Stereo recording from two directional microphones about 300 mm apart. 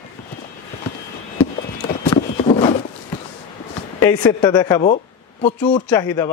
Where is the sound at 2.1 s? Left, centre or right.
Centre.